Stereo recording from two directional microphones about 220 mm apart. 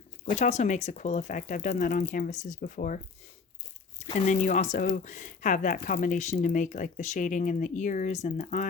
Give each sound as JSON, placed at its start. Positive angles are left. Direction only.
{"t": 0.3, "sound": "speech", "side_deg": 30}
{"t": 4.0, "sound": "speech", "side_deg": 35}